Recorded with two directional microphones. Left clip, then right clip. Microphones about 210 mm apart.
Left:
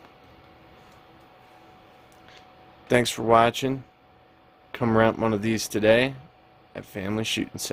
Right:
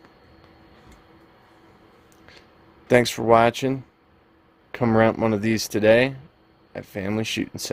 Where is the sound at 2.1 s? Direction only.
20° right (ahead or behind).